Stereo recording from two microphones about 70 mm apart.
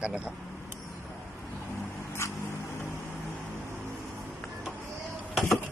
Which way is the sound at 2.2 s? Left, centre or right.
Left.